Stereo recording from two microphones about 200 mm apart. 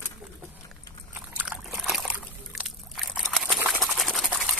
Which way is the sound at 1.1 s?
5° right (ahead or behind).